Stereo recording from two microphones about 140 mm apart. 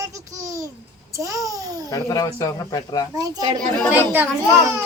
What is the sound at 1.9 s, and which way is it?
Speech, 25° left (ahead or behind).